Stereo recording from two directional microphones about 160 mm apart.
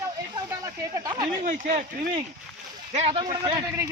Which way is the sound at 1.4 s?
55° right (ahead or behind).